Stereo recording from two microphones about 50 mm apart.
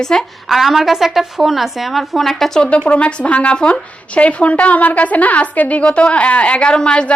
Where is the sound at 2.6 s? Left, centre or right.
Left.